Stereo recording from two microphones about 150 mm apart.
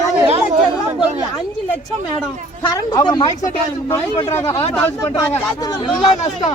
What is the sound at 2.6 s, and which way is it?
Speech, 25° left (ahead or behind).